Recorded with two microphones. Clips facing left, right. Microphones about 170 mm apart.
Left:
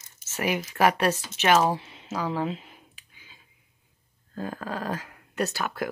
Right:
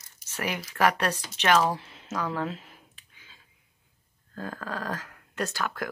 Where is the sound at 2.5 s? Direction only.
Centre (ahead or behind).